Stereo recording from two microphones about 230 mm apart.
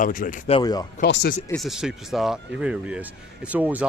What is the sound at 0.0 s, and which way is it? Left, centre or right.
Speech, left.